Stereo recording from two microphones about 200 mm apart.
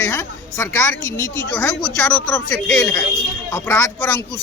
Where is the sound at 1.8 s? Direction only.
Centre (ahead or behind).